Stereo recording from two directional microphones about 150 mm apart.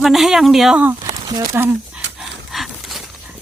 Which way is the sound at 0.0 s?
Centre (ahead or behind).